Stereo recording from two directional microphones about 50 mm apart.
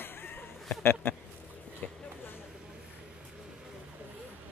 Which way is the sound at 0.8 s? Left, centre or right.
Left.